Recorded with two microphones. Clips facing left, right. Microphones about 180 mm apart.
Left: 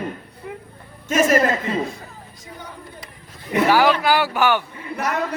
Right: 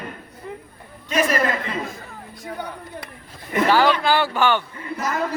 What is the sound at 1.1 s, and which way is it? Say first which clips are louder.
Speech: left 4 dB; 45° left (ahead or behind).